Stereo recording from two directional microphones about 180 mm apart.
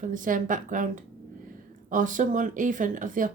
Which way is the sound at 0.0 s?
45° right (ahead or behind).